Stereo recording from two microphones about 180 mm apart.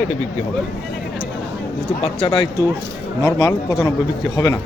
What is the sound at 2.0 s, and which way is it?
Speech, 30° left (ahead or behind).